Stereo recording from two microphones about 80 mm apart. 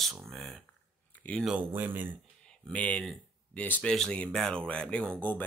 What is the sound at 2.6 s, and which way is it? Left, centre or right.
Speech, centre.